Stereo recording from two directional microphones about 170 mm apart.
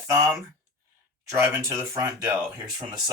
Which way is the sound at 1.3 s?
15° right (ahead or behind).